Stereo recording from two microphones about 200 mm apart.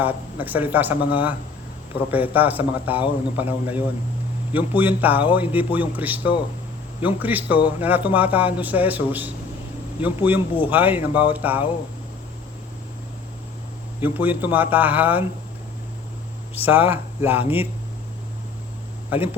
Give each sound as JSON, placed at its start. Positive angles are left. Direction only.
{"t": 0.0, "sound": "a man's voice", "side_deg": -10}
{"t": 14.0, "sound": "a man's voice", "side_deg": -10}
{"t": 16.6, "sound": "a man's voice", "side_deg": -10}
{"t": 19.1, "sound": "a man's voice", "side_deg": -10}